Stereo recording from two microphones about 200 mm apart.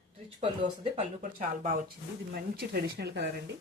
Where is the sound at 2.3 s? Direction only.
50° right (ahead or behind).